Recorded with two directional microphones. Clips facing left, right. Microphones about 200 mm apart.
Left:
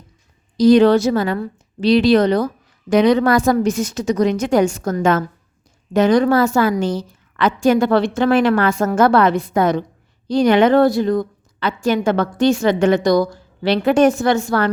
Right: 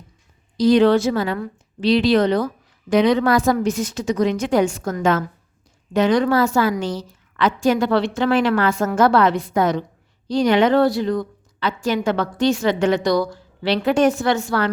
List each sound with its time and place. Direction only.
0.5 s a woman's voice: 45° left (ahead or behind)